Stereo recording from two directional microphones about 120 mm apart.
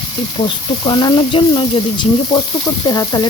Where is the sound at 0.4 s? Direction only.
40° left (ahead or behind).